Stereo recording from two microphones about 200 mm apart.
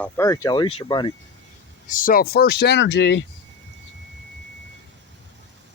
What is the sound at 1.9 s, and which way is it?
Speech, 45° left (ahead or behind).